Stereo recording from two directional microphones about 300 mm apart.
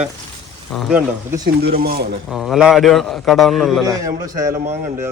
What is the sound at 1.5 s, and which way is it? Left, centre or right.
Speech, right.